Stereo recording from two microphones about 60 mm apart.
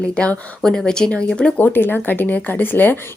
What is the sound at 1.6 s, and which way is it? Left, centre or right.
Speech, left.